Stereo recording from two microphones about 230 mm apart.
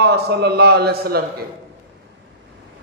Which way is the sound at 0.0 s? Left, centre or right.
Right.